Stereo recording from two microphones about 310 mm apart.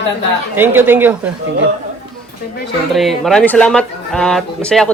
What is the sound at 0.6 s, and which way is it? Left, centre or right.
Speech, centre.